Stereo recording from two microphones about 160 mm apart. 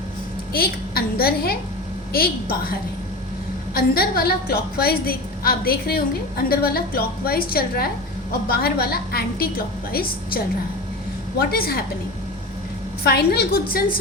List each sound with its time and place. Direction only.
0.5 s a woman's voice: 70° left (ahead or behind)
3.8 s a woman's voice: 70° left (ahead or behind)
13.1 s a woman's voice: 80° left; by 14.0 s 65° left (ahead or behind)